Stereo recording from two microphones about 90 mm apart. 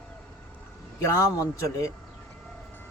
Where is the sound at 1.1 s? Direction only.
35° left (ahead or behind).